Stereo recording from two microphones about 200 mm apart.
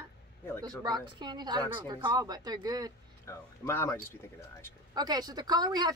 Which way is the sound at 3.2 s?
15° left (ahead or behind).